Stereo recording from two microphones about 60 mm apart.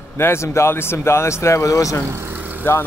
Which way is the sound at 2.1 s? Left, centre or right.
Right.